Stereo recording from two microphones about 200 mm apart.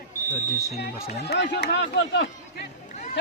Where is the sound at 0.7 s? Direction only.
55° left (ahead or behind).